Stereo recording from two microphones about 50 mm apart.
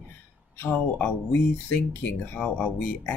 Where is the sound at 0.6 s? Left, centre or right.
Left.